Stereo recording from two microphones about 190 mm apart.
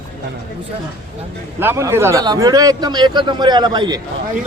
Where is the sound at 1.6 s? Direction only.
15° right (ahead or behind).